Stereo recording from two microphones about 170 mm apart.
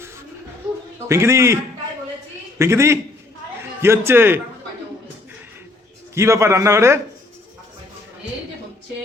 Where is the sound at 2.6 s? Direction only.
15° right (ahead or behind).